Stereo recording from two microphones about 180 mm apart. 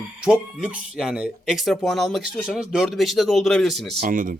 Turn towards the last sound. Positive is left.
turn(degrees=-50)  # may be behind; listen again after turning